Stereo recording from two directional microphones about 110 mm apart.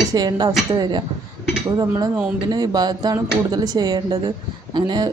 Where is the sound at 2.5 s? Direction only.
40° right (ahead or behind).